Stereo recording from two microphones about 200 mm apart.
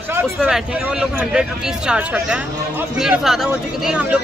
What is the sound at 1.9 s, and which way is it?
Speech, 5° right (ahead or behind).